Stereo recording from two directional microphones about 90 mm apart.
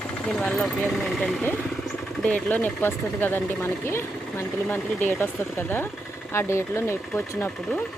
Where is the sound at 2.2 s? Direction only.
15° left (ahead or behind); by 7.5 s 30° left (ahead or behind).